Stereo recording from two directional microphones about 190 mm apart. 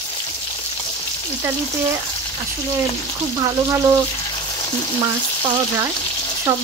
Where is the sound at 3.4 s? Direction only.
15° right (ahead or behind).